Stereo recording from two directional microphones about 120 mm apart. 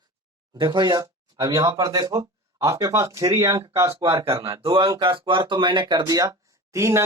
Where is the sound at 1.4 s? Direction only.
25° right (ahead or behind).